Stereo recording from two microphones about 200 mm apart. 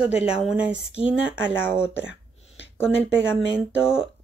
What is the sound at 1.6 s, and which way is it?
Speech, 10° left (ahead or behind).